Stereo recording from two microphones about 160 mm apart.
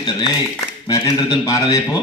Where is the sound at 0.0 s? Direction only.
30° left (ahead or behind).